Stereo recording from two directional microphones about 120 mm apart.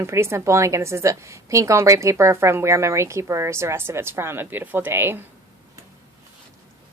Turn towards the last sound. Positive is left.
turn(degrees=-20)  # may be behind; listen again after turning